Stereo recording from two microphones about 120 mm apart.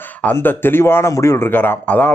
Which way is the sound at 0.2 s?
15° left (ahead or behind).